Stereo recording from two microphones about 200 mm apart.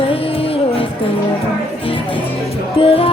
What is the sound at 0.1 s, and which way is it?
Music, 30° left (ahead or behind).